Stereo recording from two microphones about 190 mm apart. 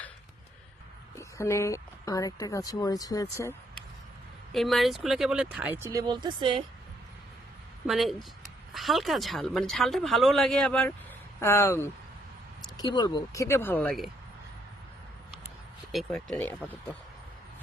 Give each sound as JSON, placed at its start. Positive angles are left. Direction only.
{"t": 1.1, "sound": "speech", "side_deg": 15}
{"t": 4.5, "sound": "speech", "side_deg": 0}
{"t": 7.9, "sound": "speech", "side_deg": 0}
{"t": 15.9, "sound": "speech", "side_deg": 0}